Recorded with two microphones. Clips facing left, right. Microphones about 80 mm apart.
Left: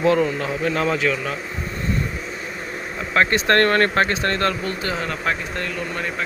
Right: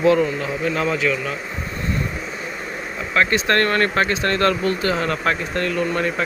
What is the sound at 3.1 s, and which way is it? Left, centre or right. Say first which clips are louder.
Speech: left 1 dB; left.